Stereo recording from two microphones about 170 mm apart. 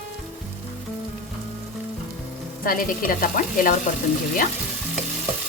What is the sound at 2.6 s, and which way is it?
Speech, 55° left (ahead or behind).